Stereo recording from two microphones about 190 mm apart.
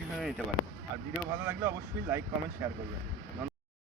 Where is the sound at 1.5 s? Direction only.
15° right (ahead or behind).